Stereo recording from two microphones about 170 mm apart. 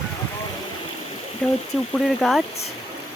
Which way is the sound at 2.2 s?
Centre (ahead or behind).